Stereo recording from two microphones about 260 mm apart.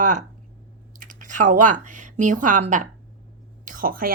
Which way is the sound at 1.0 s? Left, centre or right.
Right.